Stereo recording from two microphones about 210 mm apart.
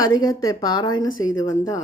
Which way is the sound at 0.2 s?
20° left (ahead or behind).